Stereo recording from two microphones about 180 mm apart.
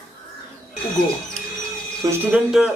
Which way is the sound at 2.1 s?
5° right (ahead or behind).